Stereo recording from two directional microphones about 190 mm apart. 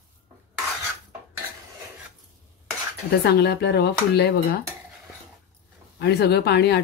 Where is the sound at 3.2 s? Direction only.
60° left (ahead or behind).